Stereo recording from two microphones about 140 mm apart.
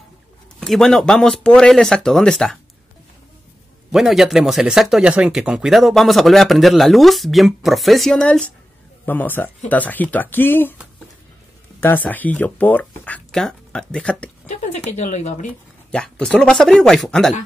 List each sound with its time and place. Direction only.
0.6 s speech: 5° left (ahead or behind)
3.9 s speech: centre (ahead or behind); by 10.8 s 15° left (ahead or behind)
11.8 s speech: 15° left (ahead or behind)
14.4 s speech: 55° left (ahead or behind)
15.9 s speech: 5° left (ahead or behind)